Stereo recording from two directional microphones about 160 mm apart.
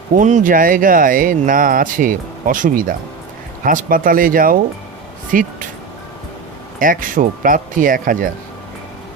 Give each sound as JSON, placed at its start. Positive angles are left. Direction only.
{"t": 0.1, "sound": "speech", "side_deg": -50}
{"t": 6.7, "sound": "speech", "side_deg": -60}